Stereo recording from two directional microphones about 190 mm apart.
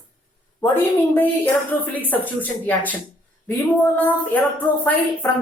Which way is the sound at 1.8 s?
10° left (ahead or behind).